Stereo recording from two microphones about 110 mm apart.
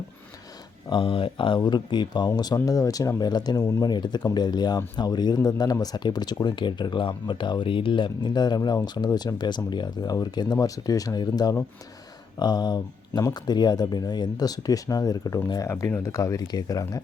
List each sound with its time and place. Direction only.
0.9 s speech: 50° left (ahead or behind)
3.6 s speech: 25° left (ahead or behind)
3.8 s speech: 40° left (ahead or behind)